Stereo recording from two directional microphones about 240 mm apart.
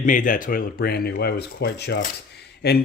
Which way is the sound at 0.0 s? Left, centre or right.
Left.